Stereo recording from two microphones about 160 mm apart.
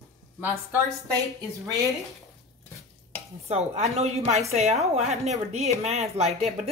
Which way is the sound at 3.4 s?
45° right (ahead or behind).